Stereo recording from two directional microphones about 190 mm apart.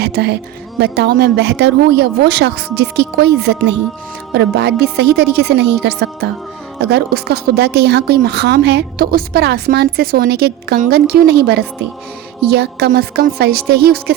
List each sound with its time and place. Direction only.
0.0 s a woman's voice: 60° right (ahead or behind)